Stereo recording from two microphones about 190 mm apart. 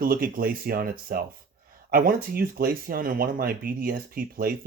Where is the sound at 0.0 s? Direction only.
50° right (ahead or behind).